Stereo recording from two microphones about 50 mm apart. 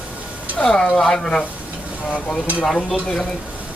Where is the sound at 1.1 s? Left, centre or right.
Centre.